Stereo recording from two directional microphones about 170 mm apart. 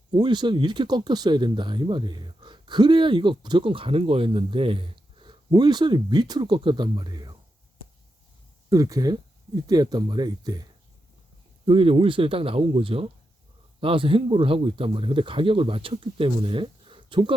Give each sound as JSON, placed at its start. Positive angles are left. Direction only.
{"t": 0.1, "sound": "speech", "side_deg": -25}
{"t": 8.7, "sound": "speech", "side_deg": -20}